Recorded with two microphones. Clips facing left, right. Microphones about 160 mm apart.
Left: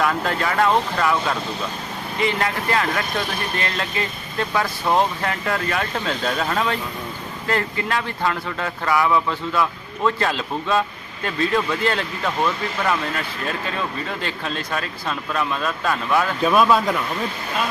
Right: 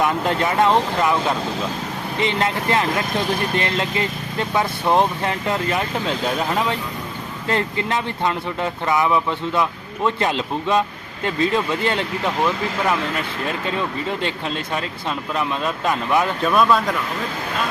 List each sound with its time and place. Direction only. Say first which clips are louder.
0.0 s speech: right 2 dB; 20° right (ahead or behind)
13.7 s speech: right 3 dB; 20° right (ahead or behind)
16.4 s speech: left 2 dB; 5° left (ahead or behind)